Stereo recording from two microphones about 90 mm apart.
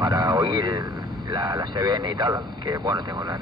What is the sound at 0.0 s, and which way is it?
Speech, 50° right (ahead or behind).